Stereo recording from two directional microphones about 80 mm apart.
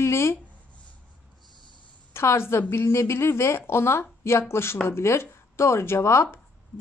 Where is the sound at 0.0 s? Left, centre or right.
Left.